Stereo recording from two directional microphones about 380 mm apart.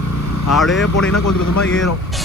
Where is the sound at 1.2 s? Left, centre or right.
Left.